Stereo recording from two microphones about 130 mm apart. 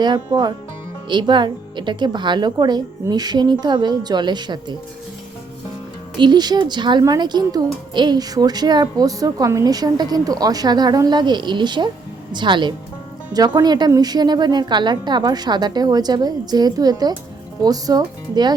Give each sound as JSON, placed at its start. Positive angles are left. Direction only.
{"t": 0.0, "sound": "a woman's voice", "side_deg": -35}
{"t": 6.1, "sound": "a woman's voice", "side_deg": -35}